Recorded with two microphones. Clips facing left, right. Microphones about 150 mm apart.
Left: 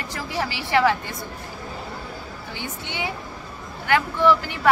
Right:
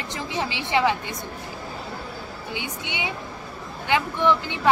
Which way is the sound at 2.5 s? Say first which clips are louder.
Even; 15° right (ahead or behind).